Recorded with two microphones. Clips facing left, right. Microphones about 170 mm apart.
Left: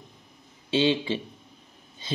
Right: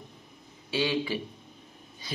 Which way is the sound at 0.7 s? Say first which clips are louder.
Left 5 dB; 25° left (ahead or behind).